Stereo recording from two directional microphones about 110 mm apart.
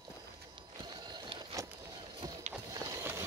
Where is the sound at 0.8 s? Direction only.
40° right (ahead or behind).